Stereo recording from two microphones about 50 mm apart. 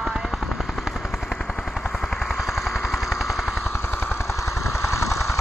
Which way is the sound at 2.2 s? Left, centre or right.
Centre.